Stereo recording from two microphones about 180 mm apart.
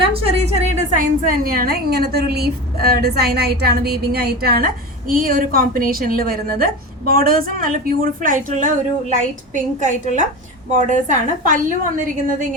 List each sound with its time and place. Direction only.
0.0 s a woman's voice: 30° right (ahead or behind)
1.3 s a woman's voice: 55° right (ahead or behind)